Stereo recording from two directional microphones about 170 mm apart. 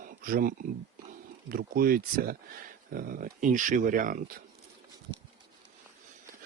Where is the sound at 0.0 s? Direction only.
55° right (ahead or behind).